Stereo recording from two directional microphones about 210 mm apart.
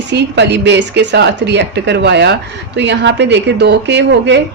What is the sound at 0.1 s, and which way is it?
Speech, 55° right (ahead or behind).